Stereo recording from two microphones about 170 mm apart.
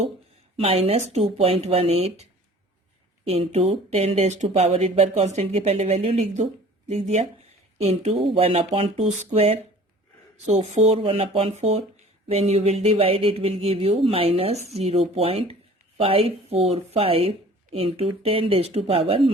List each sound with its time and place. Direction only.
0.5 s speech: 35° right (ahead or behind)
3.2 s speech: 35° right (ahead or behind)